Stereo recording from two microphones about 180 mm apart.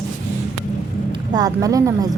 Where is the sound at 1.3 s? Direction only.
20° right (ahead or behind).